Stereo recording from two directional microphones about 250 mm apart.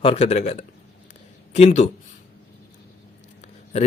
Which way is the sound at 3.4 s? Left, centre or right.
Left.